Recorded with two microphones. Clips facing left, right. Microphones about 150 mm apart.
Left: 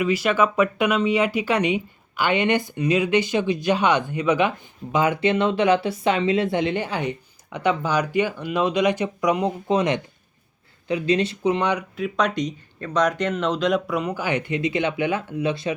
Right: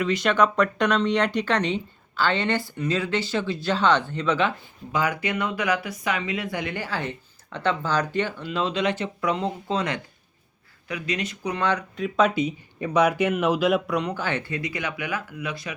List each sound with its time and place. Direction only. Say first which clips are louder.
0.0 s speech: left 1 dB; 5° left (ahead or behind)
11.9 s speech: right 1 dB; centre (ahead or behind); by 15.7 s 25° left (ahead or behind)